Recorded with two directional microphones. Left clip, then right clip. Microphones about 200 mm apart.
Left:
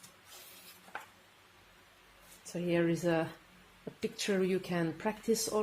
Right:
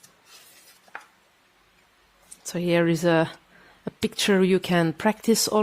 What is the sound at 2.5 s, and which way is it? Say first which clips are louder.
Speech: right 9 dB; 55° right (ahead or behind).